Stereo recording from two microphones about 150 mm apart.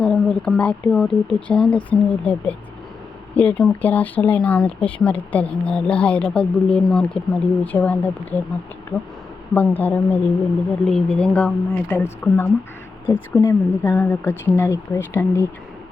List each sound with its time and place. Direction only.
0.0 s speech: 5° left (ahead or behind)
9.6 s speech: 15° left (ahead or behind)